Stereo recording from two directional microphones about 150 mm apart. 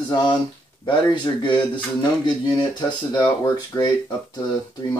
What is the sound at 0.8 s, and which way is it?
Speech, 30° left (ahead or behind).